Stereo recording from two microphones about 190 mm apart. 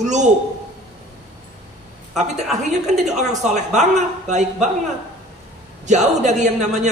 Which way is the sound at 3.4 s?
40° right (ahead or behind).